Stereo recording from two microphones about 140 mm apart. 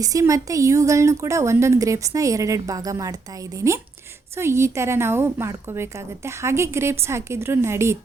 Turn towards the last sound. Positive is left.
turn(degrees=-20)  # may be behind; listen again after turning